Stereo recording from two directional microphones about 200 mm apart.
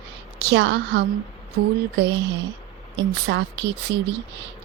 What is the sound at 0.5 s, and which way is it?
Speech, 60° right (ahead or behind).